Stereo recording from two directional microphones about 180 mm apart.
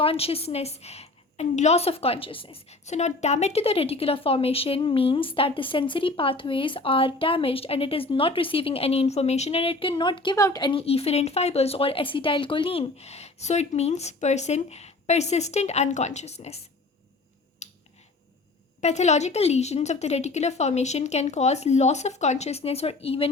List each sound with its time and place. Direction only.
0.0 s a woman's voice: 30° left (ahead or behind)
17.6 s finger snapping: 40° left (ahead or behind)
18.8 s a woman's voice: 40° left (ahead or behind)